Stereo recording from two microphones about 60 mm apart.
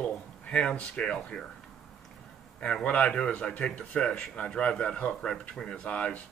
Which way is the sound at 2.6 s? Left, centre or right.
Centre.